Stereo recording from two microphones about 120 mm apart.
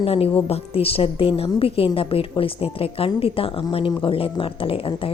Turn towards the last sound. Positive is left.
turn(degrees=50)  # may be behind; listen again after turning